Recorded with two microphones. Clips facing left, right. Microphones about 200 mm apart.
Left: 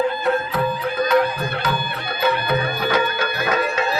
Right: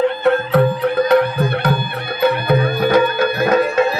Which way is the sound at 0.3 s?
65° right (ahead or behind).